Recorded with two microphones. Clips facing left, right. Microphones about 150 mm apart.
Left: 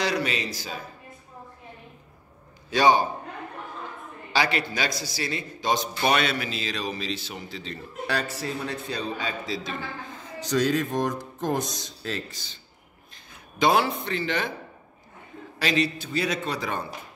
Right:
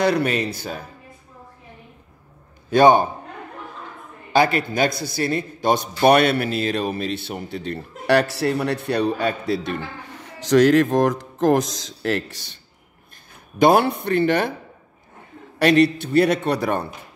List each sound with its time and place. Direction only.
0.0 s a man's voice: 55° right (ahead or behind)
2.7 s a man's voice: 55° right (ahead or behind)
4.3 s a man's voice: 50° right (ahead or behind); by 12.4 s 70° right (ahead or behind)
13.6 s a man's voice: 55° right (ahead or behind)
15.6 s a man's voice: 60° right (ahead or behind)